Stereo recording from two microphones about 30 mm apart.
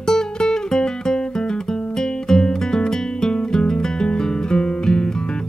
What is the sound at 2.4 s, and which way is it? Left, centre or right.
Music, left.